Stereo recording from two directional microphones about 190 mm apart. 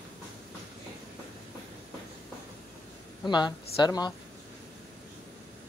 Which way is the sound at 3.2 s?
25° left (ahead or behind).